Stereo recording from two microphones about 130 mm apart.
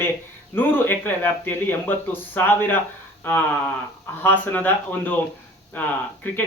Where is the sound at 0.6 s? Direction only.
15° left (ahead or behind).